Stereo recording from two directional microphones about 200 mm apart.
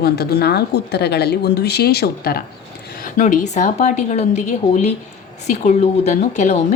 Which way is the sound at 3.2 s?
35° left (ahead or behind).